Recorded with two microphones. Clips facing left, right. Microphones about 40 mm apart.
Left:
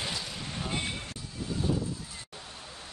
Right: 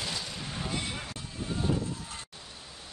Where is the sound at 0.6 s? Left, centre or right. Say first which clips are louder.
Left 2 dB; left.